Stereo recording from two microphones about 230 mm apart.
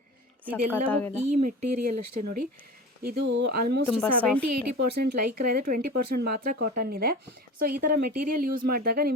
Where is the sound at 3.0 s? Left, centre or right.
Right.